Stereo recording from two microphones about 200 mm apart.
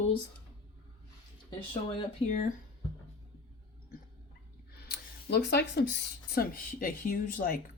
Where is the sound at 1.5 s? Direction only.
25° left (ahead or behind).